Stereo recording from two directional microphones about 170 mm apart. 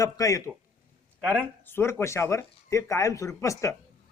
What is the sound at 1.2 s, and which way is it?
Speech, 5° left (ahead or behind).